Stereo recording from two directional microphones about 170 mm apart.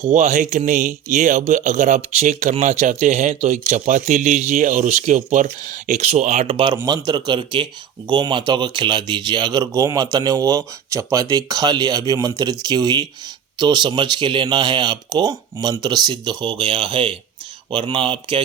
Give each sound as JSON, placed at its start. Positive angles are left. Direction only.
{"t": 0.0, "sound": "speech", "side_deg": -45}